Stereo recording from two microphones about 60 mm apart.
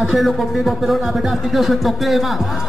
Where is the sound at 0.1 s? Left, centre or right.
Centre.